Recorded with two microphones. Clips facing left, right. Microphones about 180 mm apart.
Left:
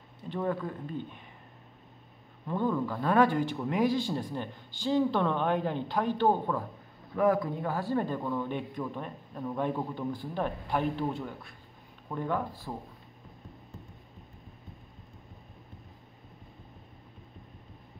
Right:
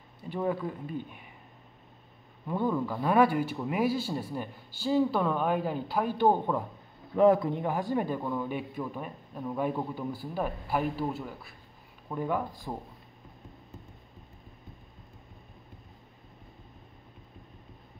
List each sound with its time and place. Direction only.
0.3 s a man's voice: 10° right (ahead or behind)
2.4 s a man's voice: 10° right (ahead or behind)